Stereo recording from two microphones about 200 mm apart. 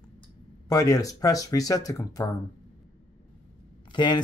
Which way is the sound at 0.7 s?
15° left (ahead or behind).